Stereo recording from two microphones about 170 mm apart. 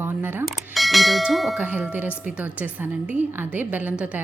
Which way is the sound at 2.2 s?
10° right (ahead or behind).